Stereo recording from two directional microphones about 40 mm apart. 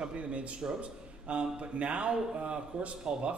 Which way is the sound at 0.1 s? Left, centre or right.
Right.